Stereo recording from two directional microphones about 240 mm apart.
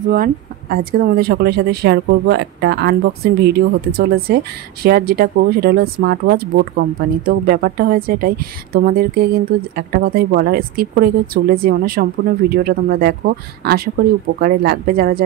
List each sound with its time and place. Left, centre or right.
0.1 s speech: right